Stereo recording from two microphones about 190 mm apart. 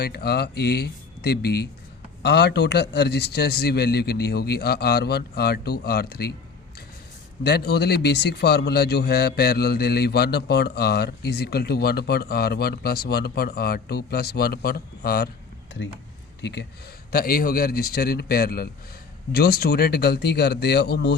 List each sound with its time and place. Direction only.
0.0 s a man's voice: 55° left (ahead or behind)
7.4 s a man's voice: 55° left (ahead or behind)
16.4 s a man's voice: 60° left (ahead or behind)
17.1 s a man's voice: 50° left (ahead or behind)